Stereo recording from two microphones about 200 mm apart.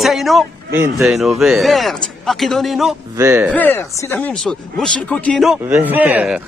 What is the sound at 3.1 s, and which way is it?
Speech, 15° right (ahead or behind).